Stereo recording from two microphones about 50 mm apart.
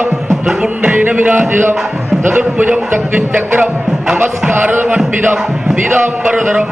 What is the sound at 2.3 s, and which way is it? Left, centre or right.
Music, right.